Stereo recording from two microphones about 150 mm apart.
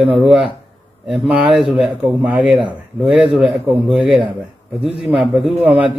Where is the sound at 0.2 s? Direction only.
Centre (ahead or behind).